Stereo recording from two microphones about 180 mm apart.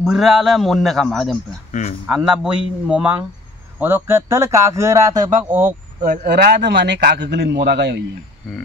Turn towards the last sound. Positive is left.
turn(degrees=-70)  # may be behind; listen again after turning